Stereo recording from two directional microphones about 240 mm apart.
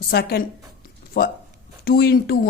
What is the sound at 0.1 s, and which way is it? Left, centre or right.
Speech, left.